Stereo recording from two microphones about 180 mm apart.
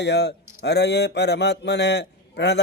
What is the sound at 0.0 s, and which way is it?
A man's voice, 70° left (ahead or behind).